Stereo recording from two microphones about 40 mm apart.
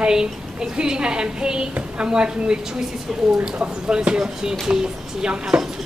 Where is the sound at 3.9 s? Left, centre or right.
Right.